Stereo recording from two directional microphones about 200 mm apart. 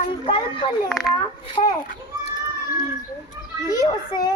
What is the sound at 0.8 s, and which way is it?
Speech, centre (ahead or behind).